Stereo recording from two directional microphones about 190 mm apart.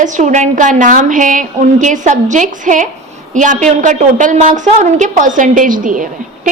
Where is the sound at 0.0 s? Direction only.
40° right (ahead or behind).